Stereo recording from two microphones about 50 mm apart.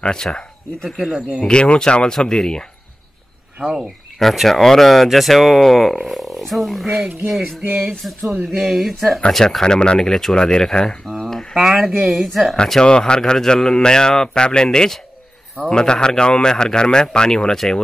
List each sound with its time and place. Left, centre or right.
0.0 s speech: centre
0.8 s speech: centre
1.4 s a man's voice: centre
3.6 s speech: centre
4.2 s speech: centre
7.6 s music: right
8.5 s a man's voice: centre
11.5 s a man's voice: centre